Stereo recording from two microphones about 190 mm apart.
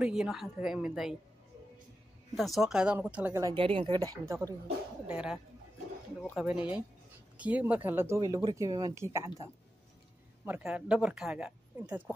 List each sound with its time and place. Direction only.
0.0 s speech: 5° right (ahead or behind)
2.3 s speech: centre (ahead or behind)
3.5 s a woman's voice: 30° right (ahead or behind)
5.0 s speech: 5° right (ahead or behind)
10.4 s speech: 5° right (ahead or behind)